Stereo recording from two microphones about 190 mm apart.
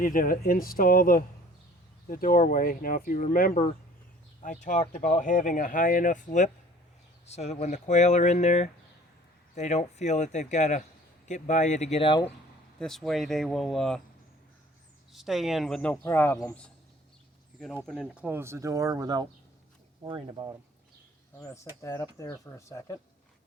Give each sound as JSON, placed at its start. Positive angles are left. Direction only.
{"t": 0.0, "sound": "speech", "side_deg": 45}
{"t": 12.8, "sound": "speech", "side_deg": 0}
{"t": 15.1, "sound": "speech", "side_deg": 0}
{"t": 17.8, "sound": "speech", "side_deg": 0}
{"t": 21.3, "sound": "speech", "side_deg": 15}